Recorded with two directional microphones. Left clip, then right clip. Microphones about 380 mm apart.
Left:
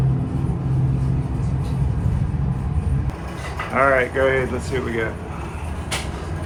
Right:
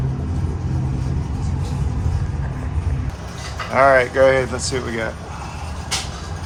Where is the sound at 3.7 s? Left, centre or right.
Centre.